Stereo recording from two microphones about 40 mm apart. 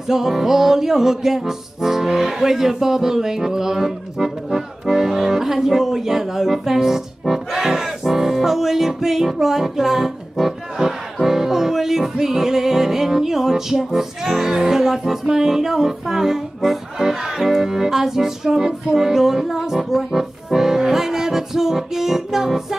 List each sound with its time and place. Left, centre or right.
0.1 s music: centre